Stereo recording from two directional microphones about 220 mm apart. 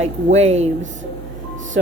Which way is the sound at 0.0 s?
30° right (ahead or behind).